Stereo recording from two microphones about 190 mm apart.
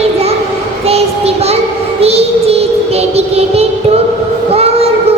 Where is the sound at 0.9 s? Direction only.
30° right (ahead or behind).